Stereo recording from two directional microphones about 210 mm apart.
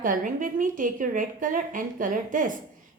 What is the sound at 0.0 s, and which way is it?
A woman's voice, 40° right (ahead or behind).